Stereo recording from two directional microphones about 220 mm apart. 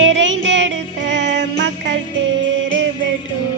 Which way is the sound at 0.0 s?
60° right (ahead or behind).